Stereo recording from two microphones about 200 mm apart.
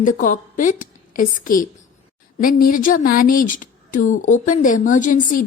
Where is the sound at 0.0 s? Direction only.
40° left (ahead or behind).